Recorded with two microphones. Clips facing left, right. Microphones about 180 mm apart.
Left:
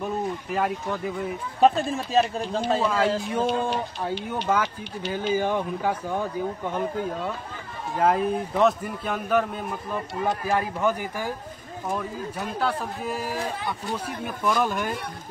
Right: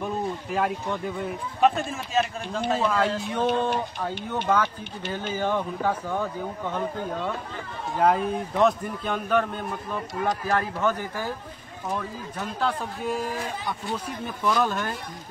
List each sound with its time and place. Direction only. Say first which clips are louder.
0.0 s speech: left 1 dB; centre (ahead or behind)
1.6 s speech: left 3 dB; 30° left (ahead or behind)
2.8 s a man's voice: left 1 dB; 5° left (ahead or behind)